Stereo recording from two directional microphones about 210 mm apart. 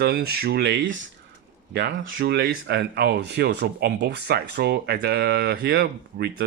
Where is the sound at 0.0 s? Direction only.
50° right (ahead or behind).